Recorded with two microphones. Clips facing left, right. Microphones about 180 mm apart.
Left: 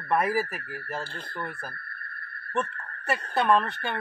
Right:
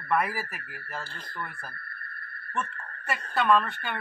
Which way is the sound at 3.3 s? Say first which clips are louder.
Even; 20° left (ahead or behind).